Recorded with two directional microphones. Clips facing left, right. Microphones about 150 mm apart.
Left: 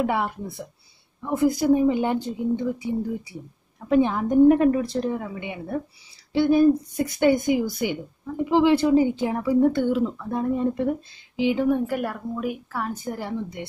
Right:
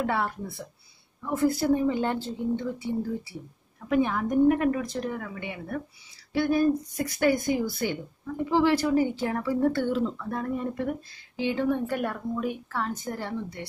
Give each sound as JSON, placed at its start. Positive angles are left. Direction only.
{"t": 0.0, "sound": "speech", "side_deg": 15}
{"t": 3.9, "sound": "a woman's voice", "side_deg": 25}